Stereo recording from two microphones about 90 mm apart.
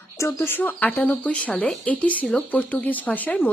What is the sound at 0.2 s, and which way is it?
A woman's voice, 30° left (ahead or behind).